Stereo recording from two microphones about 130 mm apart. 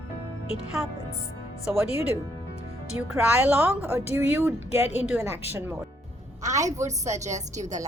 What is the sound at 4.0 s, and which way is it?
Speech, 55° left (ahead or behind).